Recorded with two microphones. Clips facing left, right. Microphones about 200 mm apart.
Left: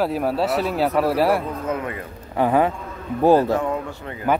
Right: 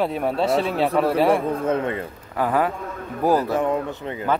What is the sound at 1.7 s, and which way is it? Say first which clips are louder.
Speech: right 2 dB; 30° right (ahead or behind).